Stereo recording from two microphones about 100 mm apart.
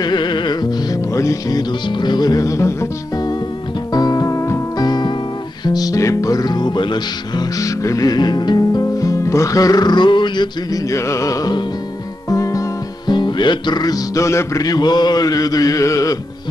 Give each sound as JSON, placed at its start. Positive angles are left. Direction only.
{"t": 0.0, "sound": "music", "side_deg": 50}
{"t": 1.1, "sound": "music", "side_deg": 30}
{"t": 1.9, "sound": "music", "side_deg": 50}
{"t": 3.9, "sound": "music", "side_deg": 40}
{"t": 4.8, "sound": "music", "side_deg": 45}
{"t": 10.9, "sound": "music", "side_deg": 30}